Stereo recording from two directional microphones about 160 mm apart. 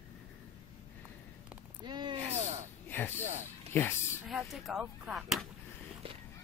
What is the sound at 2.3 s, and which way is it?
Gasp, 45° right (ahead or behind).